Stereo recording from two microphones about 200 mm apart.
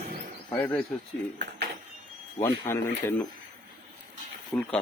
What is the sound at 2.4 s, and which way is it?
Speech, 15° left (ahead or behind).